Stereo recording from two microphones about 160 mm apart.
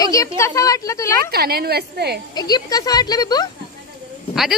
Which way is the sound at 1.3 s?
75° right (ahead or behind).